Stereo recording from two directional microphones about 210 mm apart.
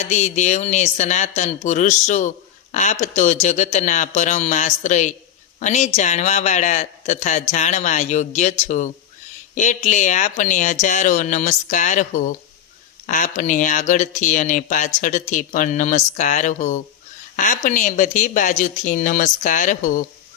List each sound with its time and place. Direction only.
0.0 s speech: 35° left (ahead or behind)